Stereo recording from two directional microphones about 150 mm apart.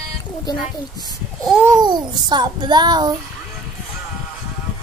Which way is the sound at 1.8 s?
30° right (ahead or behind).